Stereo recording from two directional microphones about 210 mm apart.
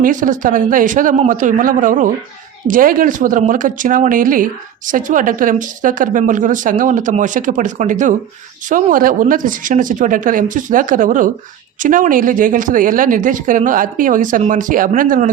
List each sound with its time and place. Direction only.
0.0 s speech: 40° right (ahead or behind)